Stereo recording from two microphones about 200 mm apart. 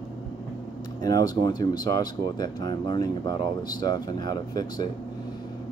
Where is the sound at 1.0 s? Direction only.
20° left (ahead or behind).